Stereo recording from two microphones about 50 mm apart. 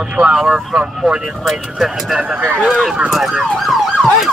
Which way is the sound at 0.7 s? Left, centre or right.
Centre.